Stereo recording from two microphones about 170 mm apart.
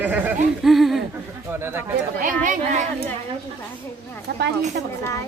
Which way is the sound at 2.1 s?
50° right (ahead or behind).